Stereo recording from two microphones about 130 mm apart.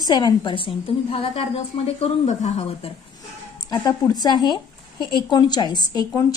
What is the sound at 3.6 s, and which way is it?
A woman's voice, 30° left (ahead or behind).